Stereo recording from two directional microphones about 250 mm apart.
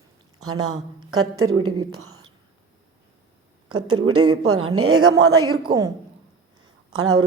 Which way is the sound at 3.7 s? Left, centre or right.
Right.